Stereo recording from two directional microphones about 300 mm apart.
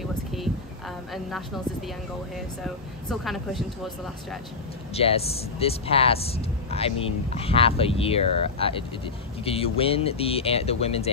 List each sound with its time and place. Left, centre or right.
2.6 s speech: centre
4.9 s speech: centre